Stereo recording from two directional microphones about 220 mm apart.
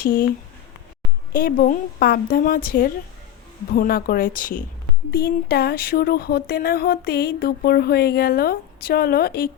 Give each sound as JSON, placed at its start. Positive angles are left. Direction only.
{"t": 0.0, "sound": "speech", "side_deg": 40}
{"t": 1.3, "sound": "speech", "side_deg": 40}
{"t": 5.1, "sound": "a sound", "side_deg": 45}